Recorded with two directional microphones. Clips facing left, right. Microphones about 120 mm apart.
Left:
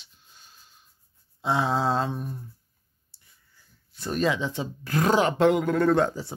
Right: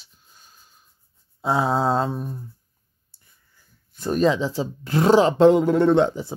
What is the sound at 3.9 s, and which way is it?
Speech, 40° right (ahead or behind).